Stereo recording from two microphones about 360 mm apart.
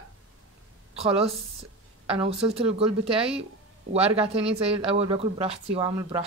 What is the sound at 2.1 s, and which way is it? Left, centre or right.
Speech, centre.